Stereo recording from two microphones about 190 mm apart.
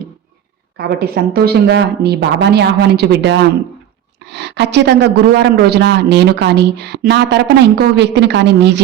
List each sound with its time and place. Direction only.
0.8 s speech: 55° right (ahead or behind)